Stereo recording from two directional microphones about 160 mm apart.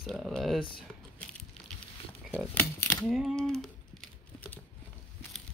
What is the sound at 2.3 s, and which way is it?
Speech, 15° left (ahead or behind).